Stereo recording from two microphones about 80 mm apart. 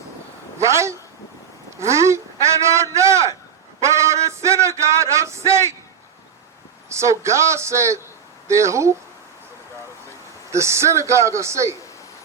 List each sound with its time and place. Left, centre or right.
0.6 s a sound: right
6.9 s a man's voice: right
10.5 s a man's voice: right